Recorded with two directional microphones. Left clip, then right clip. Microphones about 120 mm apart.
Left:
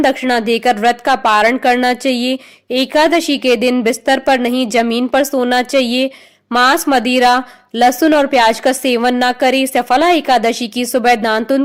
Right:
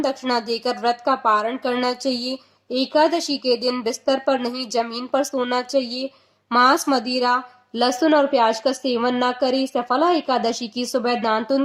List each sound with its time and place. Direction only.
0.0 s a woman's voice: 45° left (ahead or behind)